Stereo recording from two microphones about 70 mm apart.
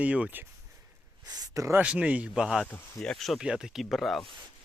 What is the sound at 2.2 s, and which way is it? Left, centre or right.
Speech, centre.